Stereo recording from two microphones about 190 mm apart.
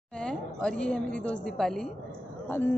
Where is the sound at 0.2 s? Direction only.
5° left (ahead or behind).